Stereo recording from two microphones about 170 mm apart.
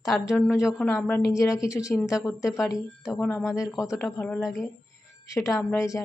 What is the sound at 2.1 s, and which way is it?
A woman's voice, 5° right (ahead or behind).